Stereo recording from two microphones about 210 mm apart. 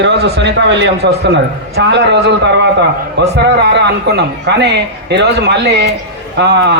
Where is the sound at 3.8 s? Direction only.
50° right (ahead or behind).